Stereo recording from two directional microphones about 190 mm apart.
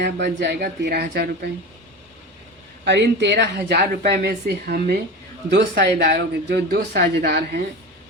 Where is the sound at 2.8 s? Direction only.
65° right (ahead or behind).